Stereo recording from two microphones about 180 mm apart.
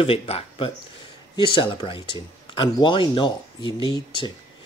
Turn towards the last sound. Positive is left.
turn(degrees=25)  # may be behind; listen again after turning